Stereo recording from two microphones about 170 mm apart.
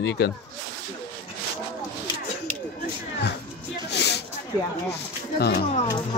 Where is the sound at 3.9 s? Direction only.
80° left.